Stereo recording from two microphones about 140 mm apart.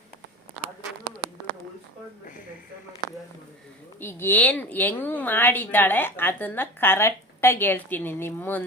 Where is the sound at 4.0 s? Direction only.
15° left (ahead or behind).